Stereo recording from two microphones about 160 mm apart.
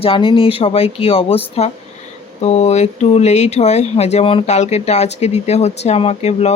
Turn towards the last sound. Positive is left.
turn(degrees=40)  # may be behind; listen again after turning